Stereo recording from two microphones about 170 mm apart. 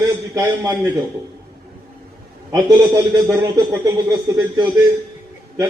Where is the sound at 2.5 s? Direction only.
20° right (ahead or behind).